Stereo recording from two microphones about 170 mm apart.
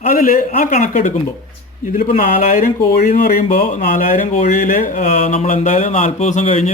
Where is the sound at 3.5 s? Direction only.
55° left (ahead or behind).